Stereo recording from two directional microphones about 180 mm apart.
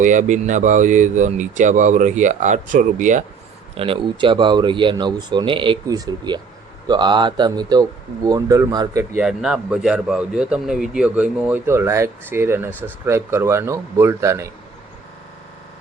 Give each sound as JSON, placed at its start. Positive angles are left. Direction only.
{"t": 0.0, "sound": "speech", "side_deg": -45}
{"t": 3.8, "sound": "speech", "side_deg": -30}
{"t": 9.1, "sound": "a man's voice", "side_deg": -5}